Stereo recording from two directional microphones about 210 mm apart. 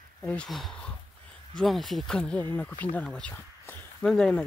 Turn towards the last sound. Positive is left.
turn(degrees=5)  # may be behind; listen again after turning